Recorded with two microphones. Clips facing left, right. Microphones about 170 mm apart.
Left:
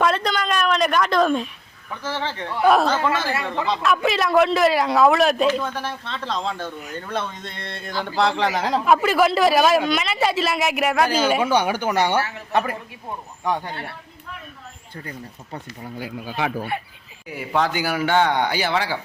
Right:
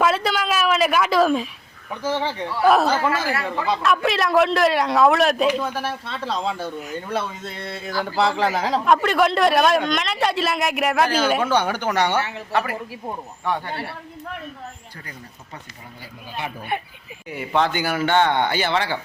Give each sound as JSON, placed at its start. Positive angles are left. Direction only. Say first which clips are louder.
{"t": 0.0, "sound": "a woman's voice", "louder": "right 1 dB", "side_deg": -5}
{"t": 1.9, "sound": "a man's voice", "louder": "right 4 dB", "side_deg": -15}
{"t": 12.5, "sound": "a woman's voice", "louder": "left 2 dB", "side_deg": 20}
{"t": 17.2, "sound": "speech", "louder": "right 1 dB", "side_deg": 5}